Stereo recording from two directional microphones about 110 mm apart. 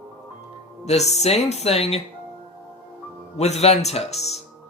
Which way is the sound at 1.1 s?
80° left.